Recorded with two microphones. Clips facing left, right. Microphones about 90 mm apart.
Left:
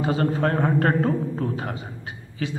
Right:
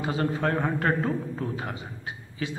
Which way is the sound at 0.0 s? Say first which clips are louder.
Left 4 dB; 45° left (ahead or behind).